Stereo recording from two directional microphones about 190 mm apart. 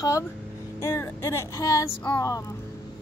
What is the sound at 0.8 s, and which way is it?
Music, 15° left (ahead or behind).